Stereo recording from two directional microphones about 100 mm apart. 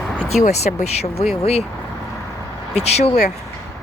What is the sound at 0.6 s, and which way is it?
Speech, 90° left.